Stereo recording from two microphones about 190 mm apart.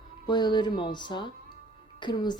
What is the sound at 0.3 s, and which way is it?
A woman's voice, 25° left (ahead or behind).